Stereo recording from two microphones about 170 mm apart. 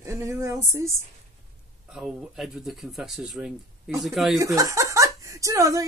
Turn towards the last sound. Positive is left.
turn(degrees=-20)  # may be behind; listen again after turning